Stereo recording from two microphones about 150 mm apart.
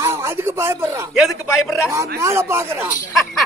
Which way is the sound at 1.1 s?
Centre (ahead or behind).